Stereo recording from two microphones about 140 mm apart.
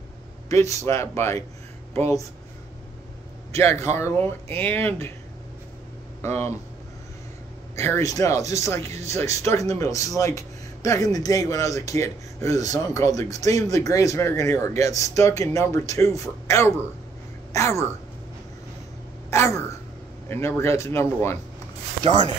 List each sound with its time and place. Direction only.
0.5 s a man's voice: 20° left (ahead or behind)
3.5 s a man's voice: 20° left (ahead or behind)
6.2 s speech: 15° left (ahead or behind)
7.7 s a man's voice: 20° left (ahead or behind)
19.3 s a man's voice: 20° left (ahead or behind)